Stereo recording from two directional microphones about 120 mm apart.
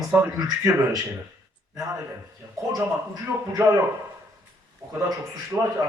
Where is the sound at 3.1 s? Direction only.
25° right (ahead or behind).